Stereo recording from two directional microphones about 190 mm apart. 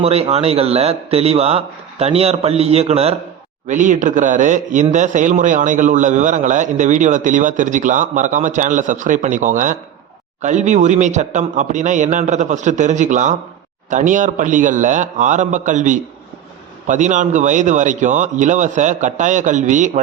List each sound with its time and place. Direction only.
0.0 s speech: 35° right (ahead or behind)